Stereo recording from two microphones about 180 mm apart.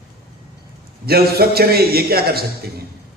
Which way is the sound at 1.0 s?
60° right (ahead or behind).